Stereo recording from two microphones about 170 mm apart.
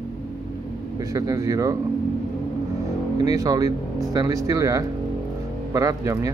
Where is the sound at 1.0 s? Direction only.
20° right (ahead or behind).